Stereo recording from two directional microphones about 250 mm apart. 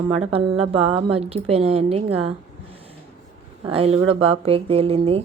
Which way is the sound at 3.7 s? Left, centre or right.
Right.